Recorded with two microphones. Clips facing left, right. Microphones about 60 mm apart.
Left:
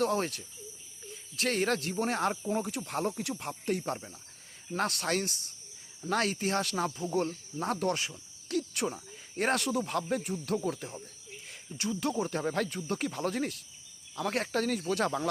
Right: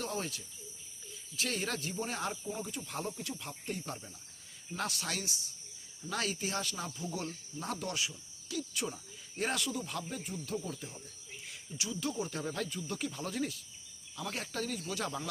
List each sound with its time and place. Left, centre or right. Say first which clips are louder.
0.0 s speech: left 9 dB; left
8.4 s cricket: left 6 dB; left
9.3 s speech: left 6 dB; left